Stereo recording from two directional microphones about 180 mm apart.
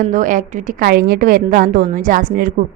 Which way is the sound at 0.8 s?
60° right (ahead or behind).